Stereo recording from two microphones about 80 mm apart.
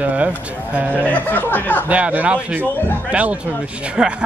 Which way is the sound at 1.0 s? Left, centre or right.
Left.